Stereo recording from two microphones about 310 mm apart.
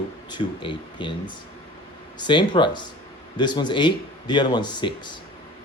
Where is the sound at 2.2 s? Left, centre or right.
Centre.